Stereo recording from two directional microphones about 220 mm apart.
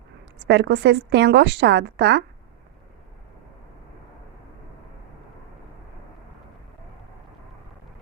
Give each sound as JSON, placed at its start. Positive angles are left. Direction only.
{"t": 0.4, "sound": "speech", "side_deg": -50}